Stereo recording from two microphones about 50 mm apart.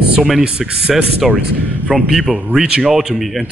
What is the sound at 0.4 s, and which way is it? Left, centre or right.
Speech, right.